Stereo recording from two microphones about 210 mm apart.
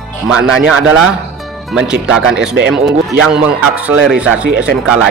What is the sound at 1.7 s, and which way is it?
A man's voice, 5° right (ahead or behind).